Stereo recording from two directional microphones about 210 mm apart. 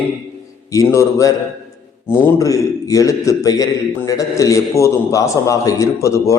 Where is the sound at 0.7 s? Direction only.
15° left (ahead or behind).